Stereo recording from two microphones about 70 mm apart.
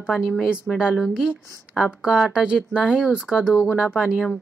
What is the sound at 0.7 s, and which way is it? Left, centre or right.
Speech, centre.